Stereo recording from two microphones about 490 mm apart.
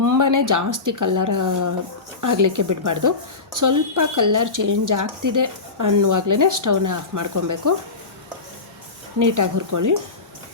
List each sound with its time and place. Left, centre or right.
0.0 s speech: right
9.1 s speech: right